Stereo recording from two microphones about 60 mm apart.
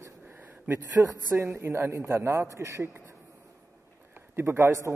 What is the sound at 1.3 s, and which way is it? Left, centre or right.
A woman's voice, right.